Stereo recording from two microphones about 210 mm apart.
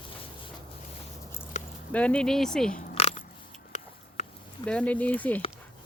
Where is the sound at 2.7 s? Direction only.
30° left (ahead or behind).